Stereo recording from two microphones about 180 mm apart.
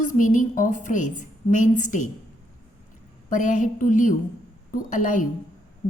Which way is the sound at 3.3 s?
45° left (ahead or behind).